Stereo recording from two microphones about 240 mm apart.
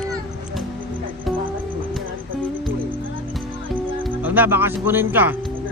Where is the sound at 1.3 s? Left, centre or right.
Centre.